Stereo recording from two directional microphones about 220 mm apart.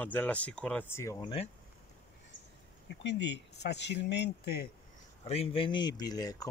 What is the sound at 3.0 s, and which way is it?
Speech, 55° left (ahead or behind).